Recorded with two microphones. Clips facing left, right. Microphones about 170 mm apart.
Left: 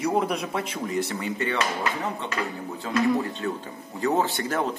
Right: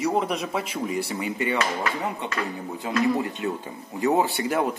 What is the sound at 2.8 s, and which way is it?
Speech, 15° right (ahead or behind).